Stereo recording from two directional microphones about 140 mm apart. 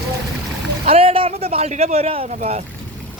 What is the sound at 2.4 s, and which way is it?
Speech, 55° right (ahead or behind).